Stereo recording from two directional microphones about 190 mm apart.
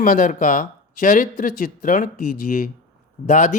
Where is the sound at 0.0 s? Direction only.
45° left (ahead or behind).